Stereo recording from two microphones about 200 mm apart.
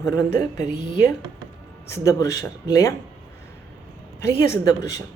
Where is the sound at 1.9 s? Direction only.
15° left (ahead or behind).